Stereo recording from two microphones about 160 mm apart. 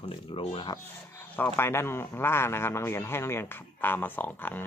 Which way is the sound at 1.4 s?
15° left (ahead or behind).